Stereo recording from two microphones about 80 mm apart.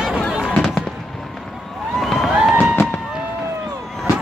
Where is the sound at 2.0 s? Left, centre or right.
Centre.